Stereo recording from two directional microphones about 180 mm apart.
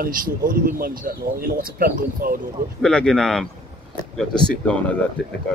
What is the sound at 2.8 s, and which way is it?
Speech, 5° left (ahead or behind).